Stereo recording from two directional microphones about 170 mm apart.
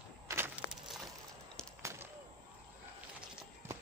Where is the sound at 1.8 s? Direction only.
15° right (ahead or behind).